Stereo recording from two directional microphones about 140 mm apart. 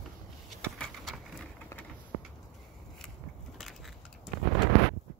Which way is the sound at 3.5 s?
Centre (ahead or behind).